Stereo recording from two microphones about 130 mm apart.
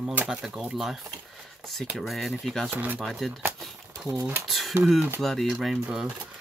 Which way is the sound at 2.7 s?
10° right (ahead or behind).